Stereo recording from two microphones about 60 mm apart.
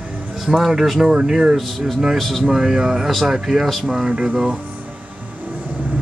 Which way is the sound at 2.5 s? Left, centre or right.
Centre.